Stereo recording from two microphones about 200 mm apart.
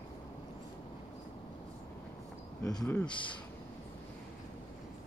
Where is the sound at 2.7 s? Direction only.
10° left (ahead or behind).